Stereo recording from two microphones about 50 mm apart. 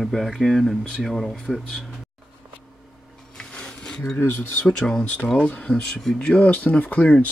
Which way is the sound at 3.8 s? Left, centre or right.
Centre.